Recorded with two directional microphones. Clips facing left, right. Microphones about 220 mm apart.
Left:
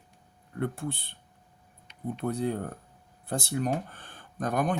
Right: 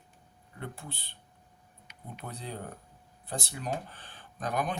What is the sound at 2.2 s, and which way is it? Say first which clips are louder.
Speech: left 11 dB; 50° left (ahead or behind).